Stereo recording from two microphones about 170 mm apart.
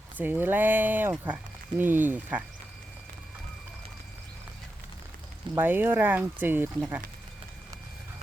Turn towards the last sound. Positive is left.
turn(degrees=-10)  # may be behind; listen again after turning